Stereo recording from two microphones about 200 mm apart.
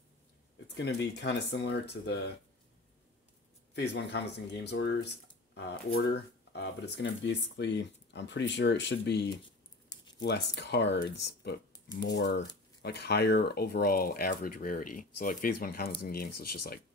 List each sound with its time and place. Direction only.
0.7 s speech: 60° left (ahead or behind)
3.7 s speech: 60° left (ahead or behind)
6.5 s speech: 60° left (ahead or behind)
9.8 s a sound: 20° left (ahead or behind)
10.2 s speech: 60° left (ahead or behind)